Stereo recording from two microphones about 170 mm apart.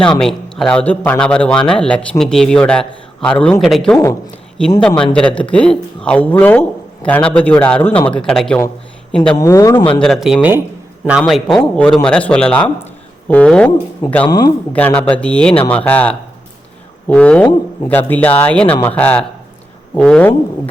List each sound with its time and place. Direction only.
0.2 s a man's voice: 5° left (ahead or behind)
9.4 s speech: 20° left (ahead or behind)
9.9 s a man's voice: 5° left (ahead or behind)
14.3 s speech: 25° left (ahead or behind)
14.7 s a man's voice: 10° left (ahead or behind)